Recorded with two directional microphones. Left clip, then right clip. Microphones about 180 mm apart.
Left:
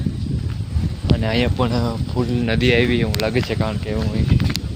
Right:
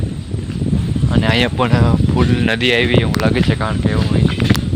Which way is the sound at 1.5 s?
15° right (ahead or behind).